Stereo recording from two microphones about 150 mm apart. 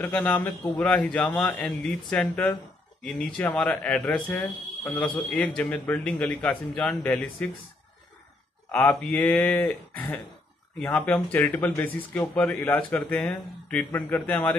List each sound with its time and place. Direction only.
0.0 s speech: 10° left (ahead or behind)
9.0 s speech: 10° left (ahead or behind)
13.9 s speech: 15° left (ahead or behind)